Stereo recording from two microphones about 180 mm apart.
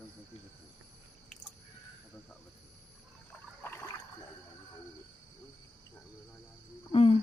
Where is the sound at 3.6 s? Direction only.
10° left (ahead or behind).